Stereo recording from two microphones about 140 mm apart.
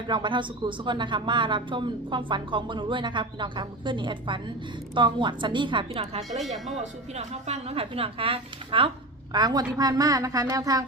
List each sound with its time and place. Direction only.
0.1 s a woman's voice: 35° right (ahead or behind)
9.3 s a woman's voice: 30° right (ahead or behind)